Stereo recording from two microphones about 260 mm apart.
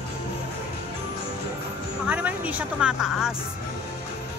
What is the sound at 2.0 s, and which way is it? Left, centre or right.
Speech, centre.